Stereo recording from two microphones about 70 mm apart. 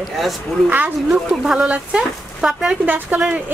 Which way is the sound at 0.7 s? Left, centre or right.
Right.